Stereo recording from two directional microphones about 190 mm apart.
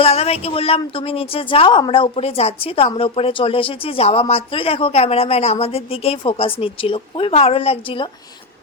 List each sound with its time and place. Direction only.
0.0 s a woman's voice: 30° left (ahead or behind)